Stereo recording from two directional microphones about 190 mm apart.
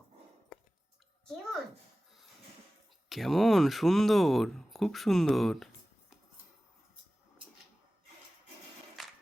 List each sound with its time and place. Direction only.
3.1 s speech: centre (ahead or behind)